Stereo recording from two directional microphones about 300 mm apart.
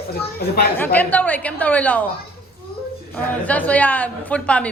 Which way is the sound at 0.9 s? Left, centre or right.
Centre.